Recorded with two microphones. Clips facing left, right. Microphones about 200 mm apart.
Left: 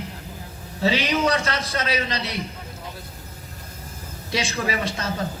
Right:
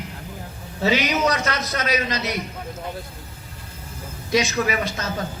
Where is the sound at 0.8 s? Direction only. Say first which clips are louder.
Right 1 dB; 30° left (ahead or behind).